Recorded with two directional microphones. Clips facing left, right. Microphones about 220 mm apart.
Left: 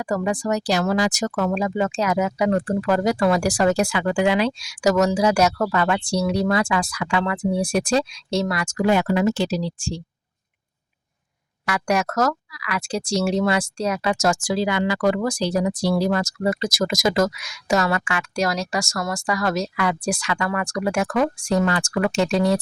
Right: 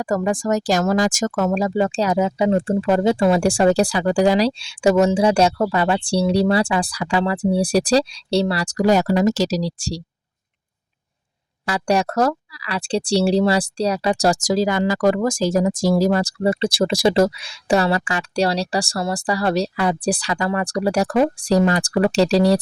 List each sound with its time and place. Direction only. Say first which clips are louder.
0.0 s speech: right 3 dB; 45° right (ahead or behind)
11.6 s speech: right 3 dB; 30° right (ahead or behind)